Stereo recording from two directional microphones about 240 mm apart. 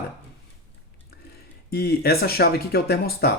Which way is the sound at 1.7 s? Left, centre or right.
Left.